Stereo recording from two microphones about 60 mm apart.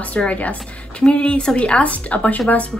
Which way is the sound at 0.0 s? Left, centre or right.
Left.